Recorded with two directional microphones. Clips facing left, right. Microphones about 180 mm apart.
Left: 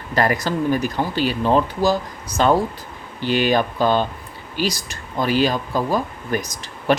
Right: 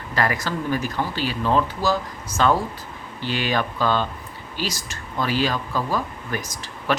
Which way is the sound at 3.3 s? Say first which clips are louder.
Left 7 dB; 50° left (ahead or behind).